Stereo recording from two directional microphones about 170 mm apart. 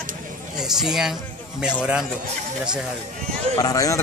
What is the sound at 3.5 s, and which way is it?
Speech, 20° left (ahead or behind).